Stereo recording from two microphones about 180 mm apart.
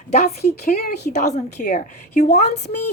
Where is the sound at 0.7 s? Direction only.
60° left (ahead or behind).